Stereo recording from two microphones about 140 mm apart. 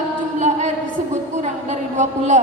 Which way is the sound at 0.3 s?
55° right (ahead or behind).